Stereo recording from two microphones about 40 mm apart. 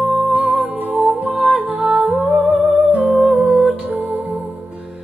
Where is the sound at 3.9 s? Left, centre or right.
Right.